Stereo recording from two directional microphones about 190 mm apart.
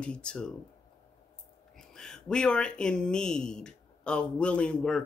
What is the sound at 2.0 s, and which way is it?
Speech, 5° left (ahead or behind).